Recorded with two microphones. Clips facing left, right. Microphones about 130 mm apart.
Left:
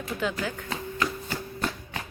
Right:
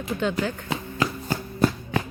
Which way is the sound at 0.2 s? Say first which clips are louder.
Right 4 dB; 5° left (ahead or behind).